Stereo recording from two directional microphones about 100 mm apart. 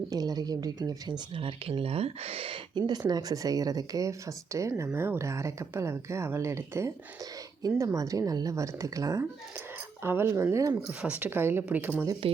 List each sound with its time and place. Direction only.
0.1 s speech: 40° right (ahead or behind)
1.4 s speech: 65° right (ahead or behind)
2.7 s speech: 45° right (ahead or behind)
10.8 s a woman's voice: 10° right (ahead or behind)
12.2 s speech: 70° right (ahead or behind)